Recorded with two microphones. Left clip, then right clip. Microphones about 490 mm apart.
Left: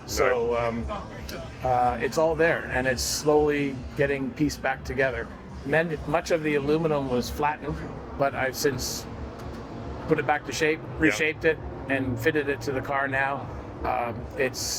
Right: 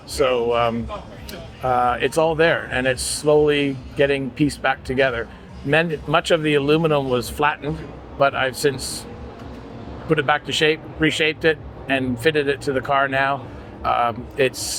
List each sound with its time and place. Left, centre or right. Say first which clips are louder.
0.1 s speech: right 5 dB; right
1.7 s a man's voice: right 5 dB; right
8.2 s a man's voice: right 7 dB; right
10.1 s a man's voice: right 6 dB; right